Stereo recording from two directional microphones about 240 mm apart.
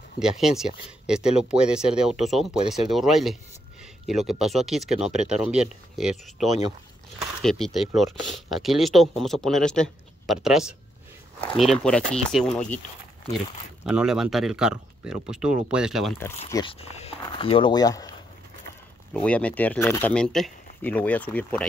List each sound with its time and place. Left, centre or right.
0.2 s speech: centre
13.8 s speech: centre
16.4 s speech: centre
16.8 s speech: left
19.1 s speech: centre